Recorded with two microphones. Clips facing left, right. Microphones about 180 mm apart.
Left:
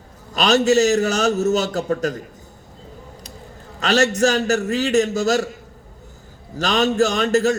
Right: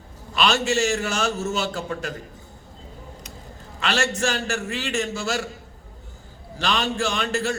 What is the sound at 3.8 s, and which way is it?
A man's voice, 40° left (ahead or behind).